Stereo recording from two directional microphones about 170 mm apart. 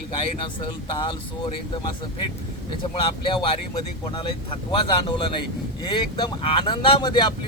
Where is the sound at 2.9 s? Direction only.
30° left (ahead or behind).